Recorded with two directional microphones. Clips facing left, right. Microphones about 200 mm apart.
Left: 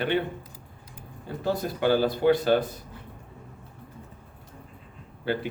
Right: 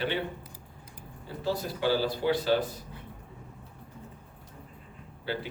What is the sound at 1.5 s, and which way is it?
A man's voice, 55° left (ahead or behind).